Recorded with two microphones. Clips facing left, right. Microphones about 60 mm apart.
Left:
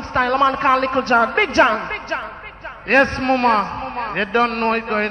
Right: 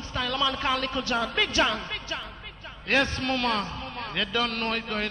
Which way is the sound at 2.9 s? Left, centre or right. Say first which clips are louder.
Left 10 dB; left.